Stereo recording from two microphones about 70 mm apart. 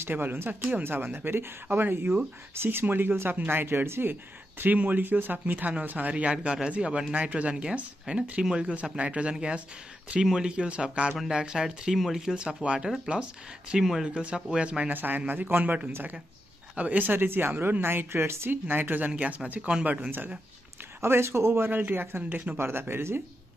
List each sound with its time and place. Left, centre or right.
0.0 s speech: right
21.0 s speech: right